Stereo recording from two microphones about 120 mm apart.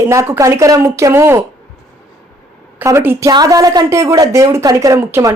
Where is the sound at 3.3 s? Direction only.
30° right (ahead or behind).